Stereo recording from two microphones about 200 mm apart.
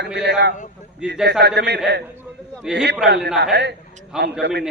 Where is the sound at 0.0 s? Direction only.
60° right (ahead or behind).